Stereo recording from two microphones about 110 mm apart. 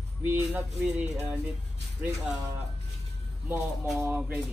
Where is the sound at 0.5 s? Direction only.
5° right (ahead or behind).